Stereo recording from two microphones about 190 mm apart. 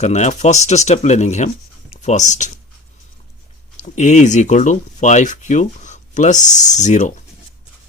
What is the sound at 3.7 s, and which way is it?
Speech, 40° left (ahead or behind).